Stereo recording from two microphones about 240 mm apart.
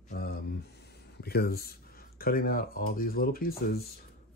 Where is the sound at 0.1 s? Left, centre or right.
Left.